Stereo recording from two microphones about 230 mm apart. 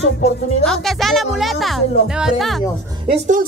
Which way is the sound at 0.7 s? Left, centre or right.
Centre.